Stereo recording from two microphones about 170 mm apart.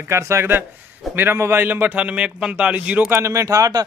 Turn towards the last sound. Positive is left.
turn(degrees=-20)  # may be behind; listen again after turning